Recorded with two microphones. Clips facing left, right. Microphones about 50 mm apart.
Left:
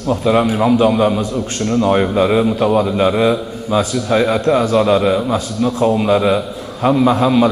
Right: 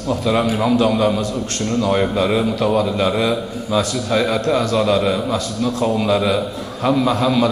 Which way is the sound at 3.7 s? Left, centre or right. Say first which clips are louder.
Left 3 dB; left.